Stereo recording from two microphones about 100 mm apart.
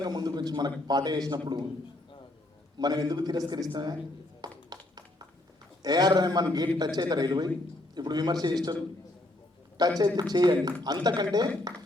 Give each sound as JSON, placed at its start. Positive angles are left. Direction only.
{"t": 0.0, "sound": "a man's voice", "side_deg": -45}
{"t": 2.7, "sound": "a man's voice", "side_deg": -45}
{"t": 4.4, "sound": "a sound", "side_deg": -45}
{"t": 5.8, "sound": "a man's voice", "side_deg": -45}
{"t": 9.8, "sound": "a man's voice", "side_deg": -40}